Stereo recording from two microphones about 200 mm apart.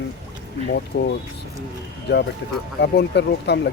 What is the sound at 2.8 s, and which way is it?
Speech, 60° left (ahead or behind).